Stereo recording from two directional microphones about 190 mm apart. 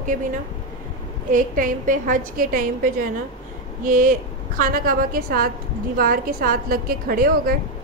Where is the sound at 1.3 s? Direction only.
45° right (ahead or behind).